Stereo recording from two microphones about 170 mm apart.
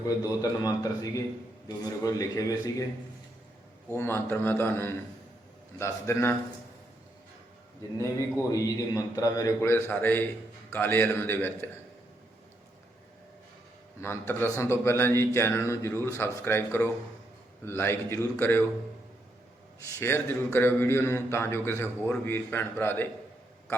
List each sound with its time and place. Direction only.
0.2 s a man's voice: 20° left (ahead or behind)
3.9 s a man's voice: 15° left (ahead or behind)
7.9 s a man's voice: 20° left (ahead or behind)
14.0 s a man's voice: 15° left (ahead or behind)
20.0 s a man's voice: 15° left (ahead or behind)